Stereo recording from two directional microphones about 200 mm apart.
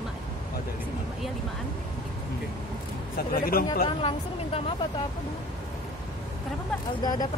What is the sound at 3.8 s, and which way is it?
Speech, 30° left (ahead or behind).